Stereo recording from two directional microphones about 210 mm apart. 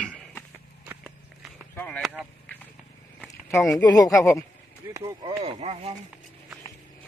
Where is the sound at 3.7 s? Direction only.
15° left (ahead or behind).